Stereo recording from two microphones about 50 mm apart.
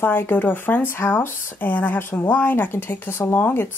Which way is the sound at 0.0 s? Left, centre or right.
Left.